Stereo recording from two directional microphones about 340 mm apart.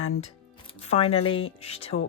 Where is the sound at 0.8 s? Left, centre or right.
Centre.